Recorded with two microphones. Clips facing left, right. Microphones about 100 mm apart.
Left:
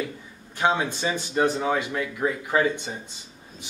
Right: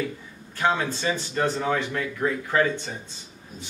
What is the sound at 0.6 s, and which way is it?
Speech, 15° left (ahead or behind).